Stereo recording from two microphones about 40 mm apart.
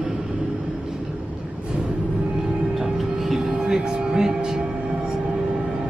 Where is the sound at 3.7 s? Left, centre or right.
Centre.